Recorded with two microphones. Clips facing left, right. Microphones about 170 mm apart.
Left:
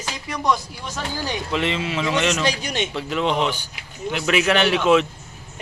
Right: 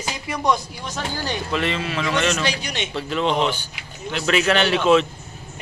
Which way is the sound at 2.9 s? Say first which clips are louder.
Right 2 dB; 15° left (ahead or behind).